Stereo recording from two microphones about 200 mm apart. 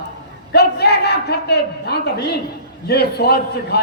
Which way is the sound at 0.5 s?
55° left (ahead or behind).